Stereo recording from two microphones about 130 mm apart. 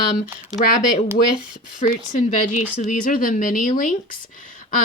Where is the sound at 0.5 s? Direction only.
90° left.